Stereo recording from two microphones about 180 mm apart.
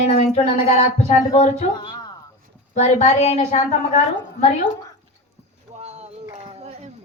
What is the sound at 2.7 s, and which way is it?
Speech, 35° left (ahead or behind).